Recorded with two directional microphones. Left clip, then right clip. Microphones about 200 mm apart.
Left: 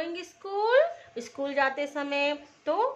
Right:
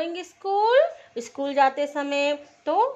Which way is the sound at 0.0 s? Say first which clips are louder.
Right 6 dB; 30° right (ahead or behind).